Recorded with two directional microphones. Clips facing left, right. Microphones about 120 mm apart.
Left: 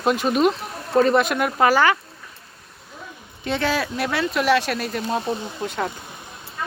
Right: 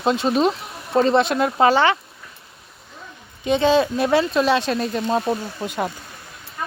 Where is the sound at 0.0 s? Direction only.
25° right (ahead or behind).